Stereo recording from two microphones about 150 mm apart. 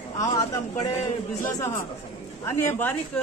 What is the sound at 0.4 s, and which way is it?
Speech, 20° left (ahead or behind).